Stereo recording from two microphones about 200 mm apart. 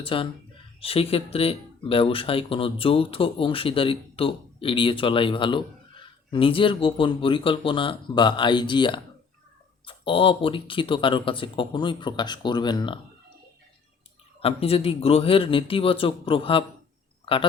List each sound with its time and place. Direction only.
0.0 s speech: 25° left (ahead or behind)
14.4 s speech: 30° left (ahead or behind)